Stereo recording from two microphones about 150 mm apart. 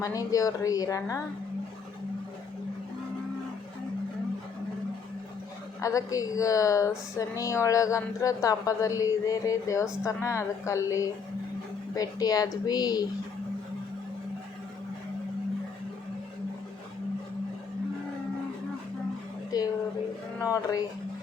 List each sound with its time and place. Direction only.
0.0 s a woman's voice: 25° left (ahead or behind)
5.8 s a woman's voice: 20° left (ahead or behind)
19.5 s a sound: 25° left (ahead or behind)
20.4 s a woman's voice: 20° left (ahead or behind)